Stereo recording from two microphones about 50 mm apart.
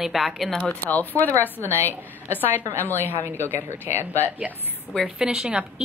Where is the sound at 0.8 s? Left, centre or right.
Left.